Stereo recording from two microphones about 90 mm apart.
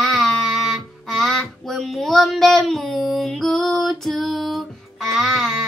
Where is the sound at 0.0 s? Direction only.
5° left (ahead or behind).